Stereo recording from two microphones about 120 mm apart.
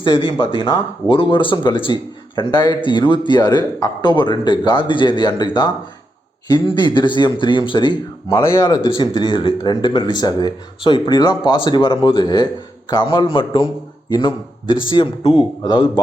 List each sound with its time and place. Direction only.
0.0 s speech: 45° left (ahead or behind)
8.3 s speech: 20° left (ahead or behind)
8.8 s speech: 40° left (ahead or behind)